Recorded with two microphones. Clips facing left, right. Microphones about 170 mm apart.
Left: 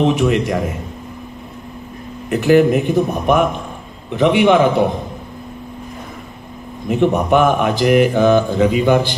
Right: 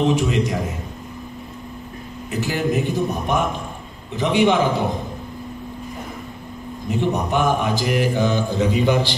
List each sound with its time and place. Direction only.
0.0 s speech: 60° left (ahead or behind)
2.2 s speech: 60° left (ahead or behind)
6.9 s speech: 60° left (ahead or behind)